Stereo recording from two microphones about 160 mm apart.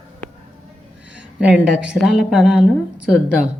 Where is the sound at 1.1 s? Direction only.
5° right (ahead or behind).